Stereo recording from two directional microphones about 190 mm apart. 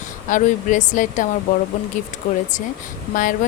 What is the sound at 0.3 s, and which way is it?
Speech, 40° left (ahead or behind).